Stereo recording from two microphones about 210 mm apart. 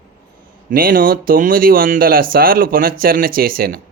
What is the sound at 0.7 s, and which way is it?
Speech, 45° right (ahead or behind).